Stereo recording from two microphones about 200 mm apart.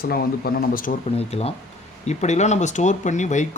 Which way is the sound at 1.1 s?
30° left (ahead or behind).